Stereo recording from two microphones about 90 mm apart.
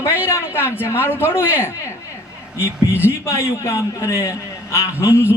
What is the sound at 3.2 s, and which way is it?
A man's voice, 35° left (ahead or behind).